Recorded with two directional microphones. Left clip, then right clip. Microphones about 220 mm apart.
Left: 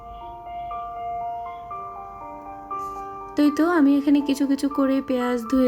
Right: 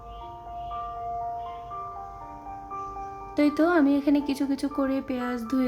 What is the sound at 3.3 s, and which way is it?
A woman's voice, 15° left (ahead or behind).